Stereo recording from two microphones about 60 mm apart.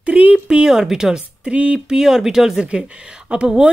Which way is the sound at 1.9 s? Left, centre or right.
Centre.